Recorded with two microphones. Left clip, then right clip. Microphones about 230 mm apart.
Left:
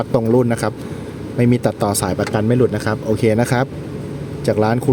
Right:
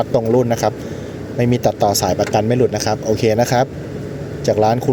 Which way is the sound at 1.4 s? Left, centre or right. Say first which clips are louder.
Right 2 dB; centre.